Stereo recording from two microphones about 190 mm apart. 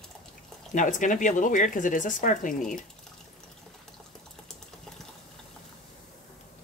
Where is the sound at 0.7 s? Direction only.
45° left (ahead or behind).